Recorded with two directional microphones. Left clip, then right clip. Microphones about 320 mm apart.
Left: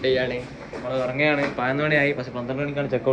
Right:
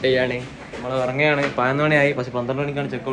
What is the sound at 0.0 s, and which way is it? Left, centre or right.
Speech, right.